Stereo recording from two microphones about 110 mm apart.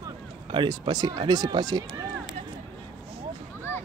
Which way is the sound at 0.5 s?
45° right (ahead or behind).